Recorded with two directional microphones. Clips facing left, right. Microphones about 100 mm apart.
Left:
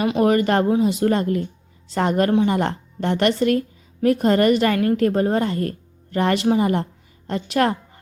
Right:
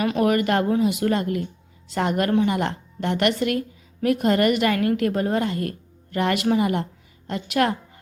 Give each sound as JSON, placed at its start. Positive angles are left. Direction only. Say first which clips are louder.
{"t": 0.0, "sound": "a woman's voice", "louder": "left 3 dB", "side_deg": 30}